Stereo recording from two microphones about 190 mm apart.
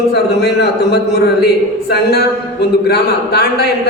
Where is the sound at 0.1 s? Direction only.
60° left (ahead or behind).